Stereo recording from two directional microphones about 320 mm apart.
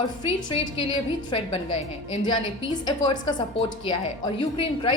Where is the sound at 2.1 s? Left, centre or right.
Centre.